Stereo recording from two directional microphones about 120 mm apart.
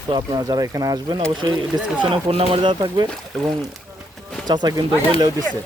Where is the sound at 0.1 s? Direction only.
30° right (ahead or behind).